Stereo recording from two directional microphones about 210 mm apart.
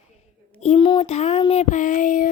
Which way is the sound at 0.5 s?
30° left (ahead or behind).